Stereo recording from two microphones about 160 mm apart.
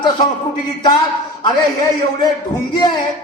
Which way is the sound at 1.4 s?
25° left (ahead or behind).